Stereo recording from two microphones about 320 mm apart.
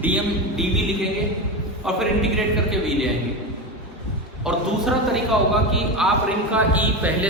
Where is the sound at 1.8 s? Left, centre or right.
Centre.